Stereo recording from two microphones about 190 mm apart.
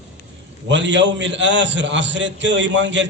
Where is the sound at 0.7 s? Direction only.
70° right (ahead or behind).